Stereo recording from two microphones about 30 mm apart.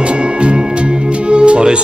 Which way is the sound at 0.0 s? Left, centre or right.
Right.